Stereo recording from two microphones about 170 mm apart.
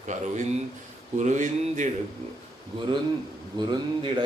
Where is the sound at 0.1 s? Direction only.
45° right (ahead or behind).